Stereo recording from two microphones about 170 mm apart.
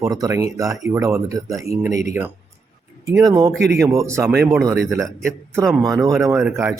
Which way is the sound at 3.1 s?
20° right (ahead or behind).